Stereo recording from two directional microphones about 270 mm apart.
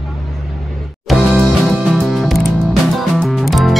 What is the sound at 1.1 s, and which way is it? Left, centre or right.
Music, centre.